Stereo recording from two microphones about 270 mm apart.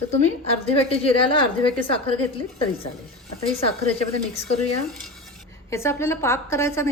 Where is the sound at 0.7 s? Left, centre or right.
Left.